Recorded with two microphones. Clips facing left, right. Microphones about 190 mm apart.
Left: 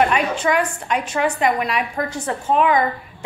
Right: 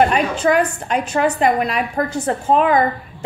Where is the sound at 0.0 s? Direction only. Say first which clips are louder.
Right 3 dB; 35° right (ahead or behind).